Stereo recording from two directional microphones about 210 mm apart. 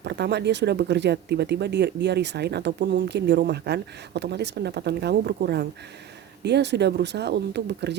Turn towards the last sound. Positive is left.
turn(degrees=-55)  # may be behind; listen again after turning